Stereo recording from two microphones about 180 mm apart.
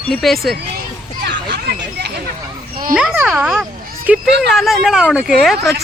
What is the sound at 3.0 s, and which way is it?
Speech, 5° right (ahead or behind).